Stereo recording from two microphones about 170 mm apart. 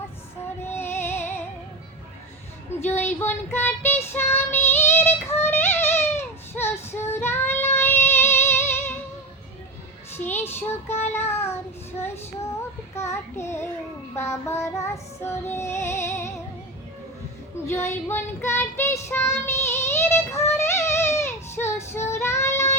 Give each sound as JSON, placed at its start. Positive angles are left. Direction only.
{"t": 0.6, "sound": "music", "side_deg": 15}
{"t": 2.8, "sound": "child singing", "side_deg": 10}
{"t": 4.1, "sound": "female singing", "side_deg": 10}
{"t": 10.2, "sound": "child singing", "side_deg": 10}
{"t": 14.2, "sound": "music", "side_deg": 15}
{"t": 17.7, "sound": "child singing", "side_deg": 15}